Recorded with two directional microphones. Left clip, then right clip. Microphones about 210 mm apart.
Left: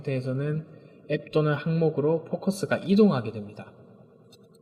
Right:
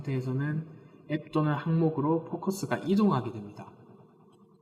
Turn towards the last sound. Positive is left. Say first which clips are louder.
# left 2 dB
turn(degrees=35)  # may be behind; listen again after turning